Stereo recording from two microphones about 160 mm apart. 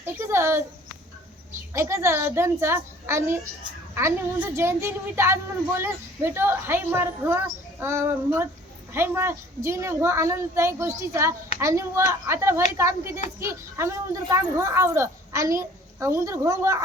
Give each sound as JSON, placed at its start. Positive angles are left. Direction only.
{"t": 0.0, "sound": "a woman's voice", "side_deg": -15}
{"t": 1.7, "sound": "a woman's voice", "side_deg": -15}